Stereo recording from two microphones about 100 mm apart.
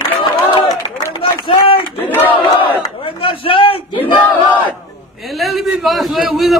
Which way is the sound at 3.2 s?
65° left (ahead or behind).